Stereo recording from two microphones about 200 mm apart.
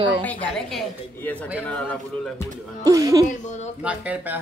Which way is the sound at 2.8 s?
20° right (ahead or behind).